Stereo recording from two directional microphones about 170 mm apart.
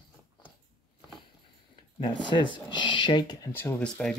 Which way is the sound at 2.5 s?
25° left (ahead or behind).